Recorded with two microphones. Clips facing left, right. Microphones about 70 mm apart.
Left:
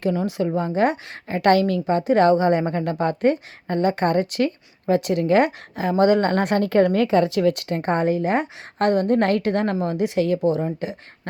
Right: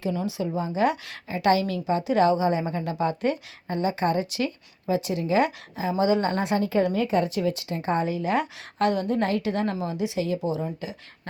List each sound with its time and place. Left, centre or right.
0.0 s a woman's voice: left